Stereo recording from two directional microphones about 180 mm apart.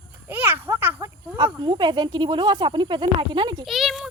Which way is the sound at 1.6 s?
25° right (ahead or behind).